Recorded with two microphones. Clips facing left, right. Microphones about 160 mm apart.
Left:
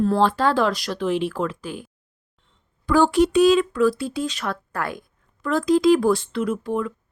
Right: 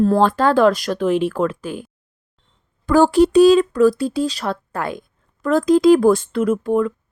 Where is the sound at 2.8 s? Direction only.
40° right (ahead or behind); by 5.1 s 20° right (ahead or behind).